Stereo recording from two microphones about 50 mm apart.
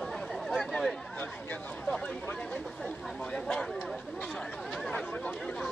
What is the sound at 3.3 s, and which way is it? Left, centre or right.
Speech, centre.